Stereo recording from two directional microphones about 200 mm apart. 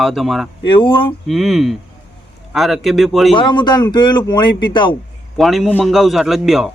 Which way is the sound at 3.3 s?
25° left (ahead or behind).